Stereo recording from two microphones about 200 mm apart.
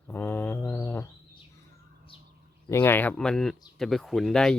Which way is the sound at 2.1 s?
25° left (ahead or behind).